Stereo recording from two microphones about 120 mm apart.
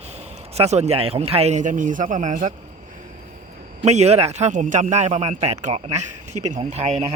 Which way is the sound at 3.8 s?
65° right (ahead or behind).